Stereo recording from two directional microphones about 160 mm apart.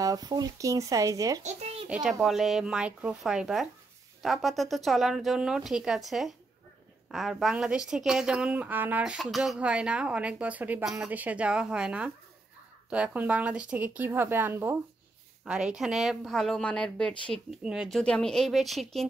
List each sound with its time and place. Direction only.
0.0 s speech: 25° right (ahead or behind)
1.4 s a child's voice: 45° right (ahead or behind)
1.9 s speech: 5° right (ahead or behind)